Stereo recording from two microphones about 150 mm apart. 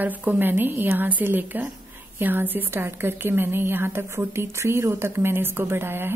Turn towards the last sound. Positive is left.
turn(degrees=-15)  # may be behind; listen again after turning